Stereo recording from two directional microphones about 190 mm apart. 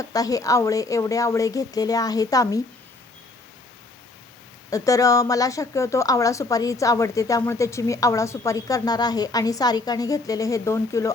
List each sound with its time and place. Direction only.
0.0 s a woman's voice: 20° left (ahead or behind)
4.7 s a woman's voice: 15° left (ahead or behind)